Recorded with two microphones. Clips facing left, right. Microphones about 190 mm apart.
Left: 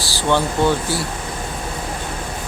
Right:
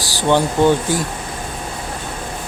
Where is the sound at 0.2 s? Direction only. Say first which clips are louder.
Right 3 dB; 15° right (ahead or behind).